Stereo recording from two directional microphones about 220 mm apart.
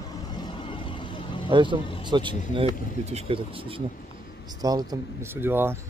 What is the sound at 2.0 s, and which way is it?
Speech, 20° right (ahead or behind).